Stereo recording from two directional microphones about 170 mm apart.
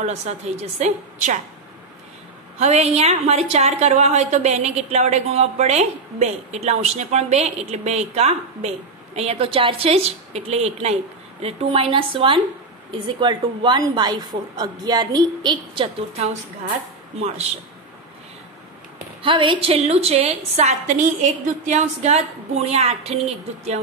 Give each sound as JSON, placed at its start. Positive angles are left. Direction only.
{"t": 0.0, "sound": "a woman's voice", "side_deg": -40}
{"t": 2.6, "sound": "a woman's voice", "side_deg": -40}
{"t": 19.2, "sound": "a woman's voice", "side_deg": -30}